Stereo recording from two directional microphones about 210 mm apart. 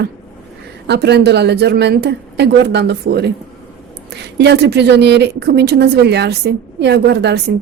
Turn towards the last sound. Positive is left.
turn(degrees=-50)  # may be behind; listen again after turning